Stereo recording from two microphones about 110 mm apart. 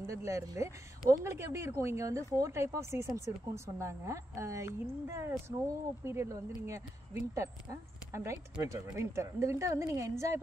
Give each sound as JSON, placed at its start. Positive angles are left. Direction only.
{"t": 0.0, "sound": "a woman's voice", "side_deg": -25}